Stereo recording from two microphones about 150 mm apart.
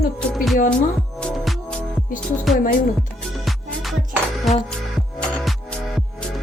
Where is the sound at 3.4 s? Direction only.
Centre (ahead or behind).